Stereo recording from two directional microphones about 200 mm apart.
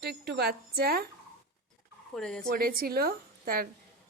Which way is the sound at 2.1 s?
5° left (ahead or behind).